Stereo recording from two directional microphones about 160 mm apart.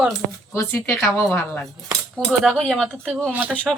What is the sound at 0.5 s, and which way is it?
A woman's voice, 15° left (ahead or behind).